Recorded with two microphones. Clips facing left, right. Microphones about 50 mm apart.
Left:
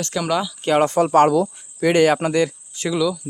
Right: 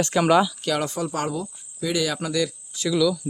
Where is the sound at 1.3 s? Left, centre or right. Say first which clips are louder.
Left 11 dB; left.